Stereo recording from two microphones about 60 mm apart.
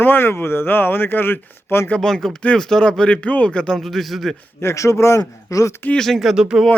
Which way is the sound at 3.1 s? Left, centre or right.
Left.